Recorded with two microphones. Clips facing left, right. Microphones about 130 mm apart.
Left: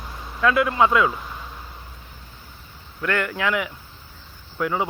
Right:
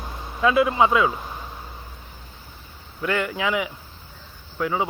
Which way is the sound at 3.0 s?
10° right (ahead or behind).